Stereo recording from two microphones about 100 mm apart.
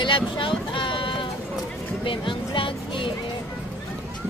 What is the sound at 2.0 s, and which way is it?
Music, 60° left (ahead or behind).